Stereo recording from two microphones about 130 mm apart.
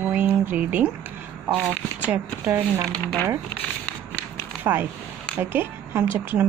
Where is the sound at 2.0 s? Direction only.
15° right (ahead or behind).